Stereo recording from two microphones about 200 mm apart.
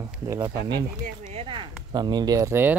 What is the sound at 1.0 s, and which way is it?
Speech, 40° right (ahead or behind).